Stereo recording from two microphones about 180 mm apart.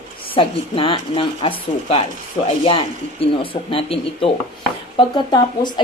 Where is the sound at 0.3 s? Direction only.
30° left (ahead or behind).